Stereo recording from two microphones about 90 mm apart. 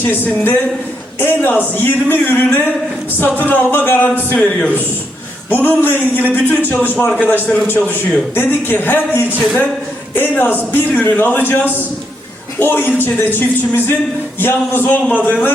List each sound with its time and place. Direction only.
0.0 s a woman's voice: 20° left (ahead or behind)
5.5 s a woman's voice: 20° left (ahead or behind)